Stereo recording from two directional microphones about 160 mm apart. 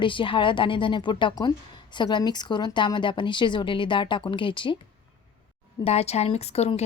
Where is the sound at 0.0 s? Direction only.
30° left (ahead or behind).